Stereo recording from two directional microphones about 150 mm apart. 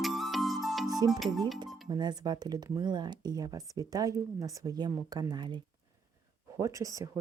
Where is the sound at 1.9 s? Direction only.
30° right (ahead or behind).